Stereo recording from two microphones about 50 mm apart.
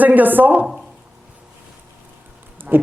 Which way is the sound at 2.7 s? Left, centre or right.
Right.